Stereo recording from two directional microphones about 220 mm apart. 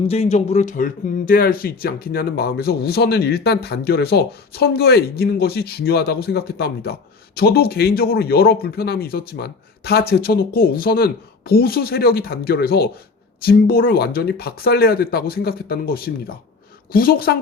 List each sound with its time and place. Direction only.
0.1 s speech: 30° left (ahead or behind)